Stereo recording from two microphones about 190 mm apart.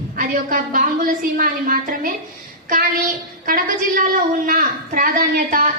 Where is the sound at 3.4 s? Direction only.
45° right (ahead or behind).